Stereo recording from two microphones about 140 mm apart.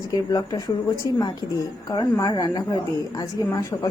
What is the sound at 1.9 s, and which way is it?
A woman's voice, 25° left (ahead or behind).